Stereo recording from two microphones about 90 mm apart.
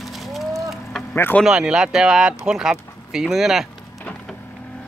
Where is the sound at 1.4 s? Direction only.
5° right (ahead or behind).